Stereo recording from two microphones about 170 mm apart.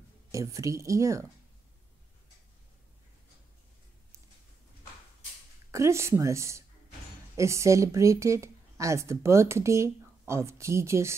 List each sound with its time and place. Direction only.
0.3 s a woman's voice: 20° right (ahead or behind)
5.7 s a woman's voice: 15° right (ahead or behind)